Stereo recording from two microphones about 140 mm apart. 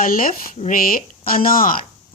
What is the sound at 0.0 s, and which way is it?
Speech, 85° left.